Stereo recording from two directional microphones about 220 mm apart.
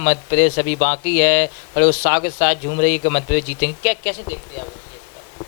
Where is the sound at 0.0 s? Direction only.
10° left (ahead or behind).